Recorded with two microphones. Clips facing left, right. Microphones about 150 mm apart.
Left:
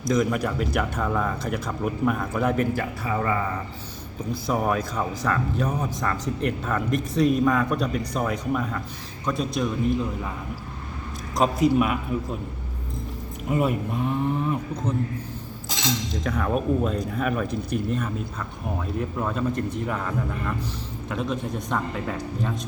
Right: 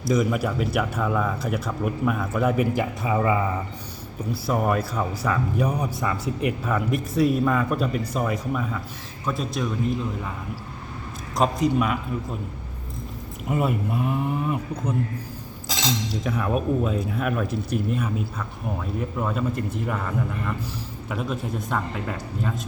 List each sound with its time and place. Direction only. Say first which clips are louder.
0.0 s speech: even; 5° right (ahead or behind)
2.7 s a man's voice: right 3 dB; 15° right (ahead or behind)
4.3 s a man's voice: right 1 dB; centre (ahead or behind)
11.3 s speech: left 1 dB; 5° left (ahead or behind)
13.5 s speech: even; centre (ahead or behind)
16.2 s speech: even; 5° right (ahead or behind)